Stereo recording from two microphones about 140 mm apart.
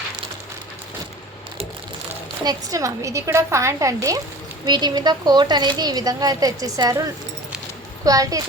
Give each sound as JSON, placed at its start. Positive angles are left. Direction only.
{"t": 2.4, "sound": "a woman's voice", "side_deg": -25}
{"t": 8.0, "sound": "a woman's voice", "side_deg": -25}